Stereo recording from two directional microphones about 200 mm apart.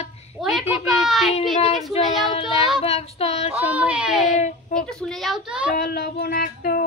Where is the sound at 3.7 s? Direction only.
5° right (ahead or behind).